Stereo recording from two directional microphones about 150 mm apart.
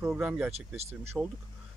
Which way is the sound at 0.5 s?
45° right (ahead or behind).